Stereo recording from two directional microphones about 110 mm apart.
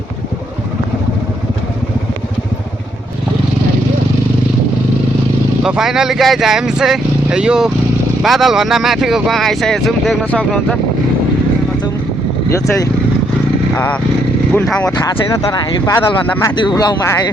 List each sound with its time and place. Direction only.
5.6 s speech: 5° right (ahead or behind)
13.7 s speech: 15° left (ahead or behind)
15.3 s speech: 30° left (ahead or behind)
16.6 s speech: 40° left (ahead or behind)